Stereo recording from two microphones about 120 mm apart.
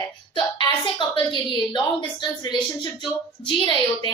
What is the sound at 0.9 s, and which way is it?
A woman's voice, 40° left (ahead or behind).